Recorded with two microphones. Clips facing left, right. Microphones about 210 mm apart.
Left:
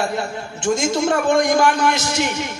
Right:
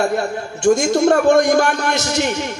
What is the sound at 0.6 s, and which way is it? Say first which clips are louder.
A man's voice: right 5 dB; 65° right (ahead or behind).